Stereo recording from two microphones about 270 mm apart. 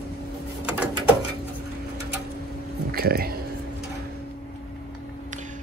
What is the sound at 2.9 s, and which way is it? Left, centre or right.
Speech, right.